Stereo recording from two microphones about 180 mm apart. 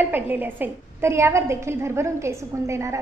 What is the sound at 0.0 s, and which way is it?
A woman's voice, 10° right (ahead or behind).